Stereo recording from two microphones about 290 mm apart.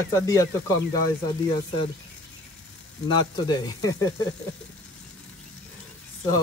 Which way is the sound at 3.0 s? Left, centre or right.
Centre.